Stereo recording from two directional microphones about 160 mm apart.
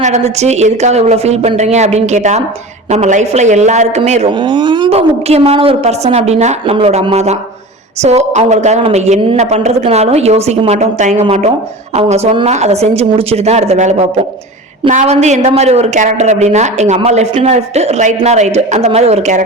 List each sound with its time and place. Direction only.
0.0 s a woman's voice: 45° right (ahead or behind); by 4.9 s 30° right (ahead or behind)
4.9 s a woman's voice: 40° right (ahead or behind)